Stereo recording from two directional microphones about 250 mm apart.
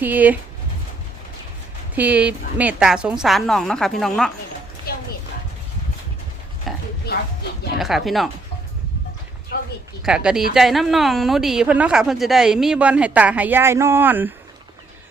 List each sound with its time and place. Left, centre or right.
0.0 s speech: centre
2.0 s a woman's voice: centre
4.9 s dog: left
6.7 s a sound: centre
7.1 s a sound: left
7.8 s a woman's voice: centre
10.0 s a woman's voice: centre